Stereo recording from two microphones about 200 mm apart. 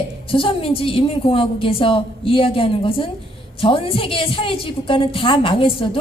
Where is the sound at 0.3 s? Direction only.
25° left (ahead or behind).